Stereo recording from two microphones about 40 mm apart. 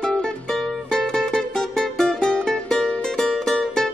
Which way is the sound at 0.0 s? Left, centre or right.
Centre.